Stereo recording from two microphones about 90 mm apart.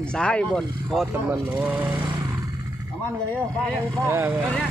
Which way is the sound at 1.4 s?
15° right (ahead or behind).